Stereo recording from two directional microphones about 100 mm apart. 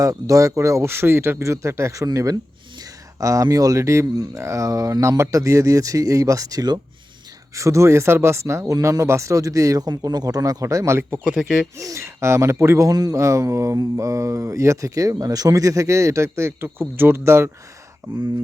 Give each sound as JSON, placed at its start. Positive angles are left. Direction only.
{"t": 0.0, "sound": "speech", "side_deg": -35}
{"t": 11.3, "sound": "speech", "side_deg": 0}
{"t": 11.8, "sound": "speech", "side_deg": -30}